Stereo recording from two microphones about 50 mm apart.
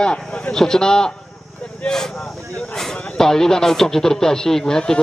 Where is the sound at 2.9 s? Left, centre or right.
Left.